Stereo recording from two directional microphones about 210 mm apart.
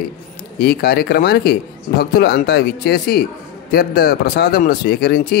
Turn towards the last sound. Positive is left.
turn(degrees=45)  # may be behind; listen again after turning